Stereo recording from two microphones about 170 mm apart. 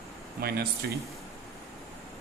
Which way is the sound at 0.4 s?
65° right (ahead or behind).